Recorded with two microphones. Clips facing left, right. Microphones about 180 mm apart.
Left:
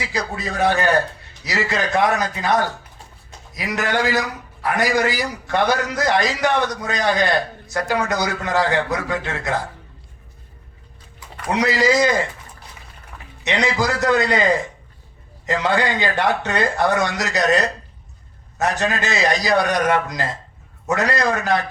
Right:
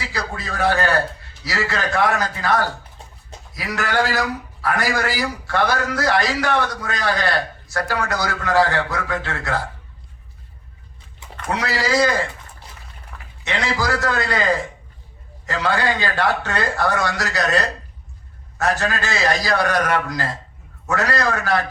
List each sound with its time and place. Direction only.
0.1 s a man's voice: 20° left (ahead or behind)
11.5 s a man's voice: 20° left (ahead or behind)
13.4 s a man's voice: 20° left (ahead or behind)
15.4 s a man's voice: 20° left (ahead or behind)